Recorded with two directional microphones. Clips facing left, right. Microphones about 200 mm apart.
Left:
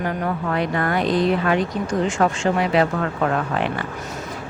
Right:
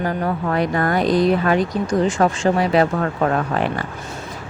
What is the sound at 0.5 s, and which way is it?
Speech, 40° right (ahead or behind).